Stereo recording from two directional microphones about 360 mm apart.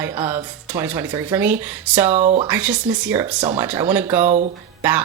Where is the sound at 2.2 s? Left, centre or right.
Centre.